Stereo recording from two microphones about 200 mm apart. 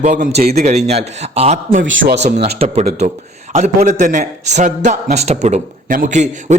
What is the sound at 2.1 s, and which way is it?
A man's voice, 35° right (ahead or behind).